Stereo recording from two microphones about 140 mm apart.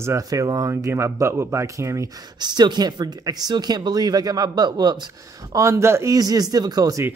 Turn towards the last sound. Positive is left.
turn(degrees=-25)  # may be behind; listen again after turning